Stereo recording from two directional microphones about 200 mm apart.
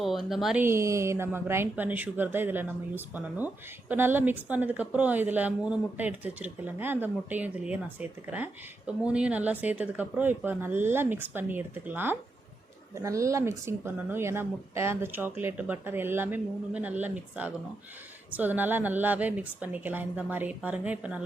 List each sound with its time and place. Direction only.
0.0 s speech: centre (ahead or behind)
0.6 s speech: 15° right (ahead or behind)